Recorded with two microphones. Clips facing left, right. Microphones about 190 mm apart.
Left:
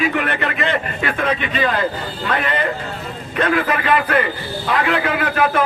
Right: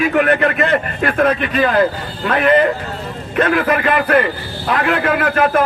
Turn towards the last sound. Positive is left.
turn(degrees=-45)  # may be behind; listen again after turning